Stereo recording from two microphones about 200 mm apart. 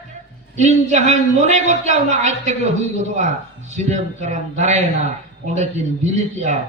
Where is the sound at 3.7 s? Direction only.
35° right (ahead or behind).